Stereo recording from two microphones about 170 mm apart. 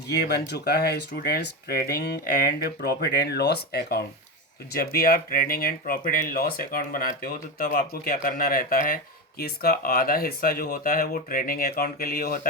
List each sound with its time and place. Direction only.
0.3 s speech: 75° left (ahead or behind); by 12.5 s 60° left (ahead or behind)